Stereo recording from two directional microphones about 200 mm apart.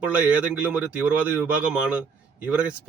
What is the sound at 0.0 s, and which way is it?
Speech, 5° right (ahead or behind).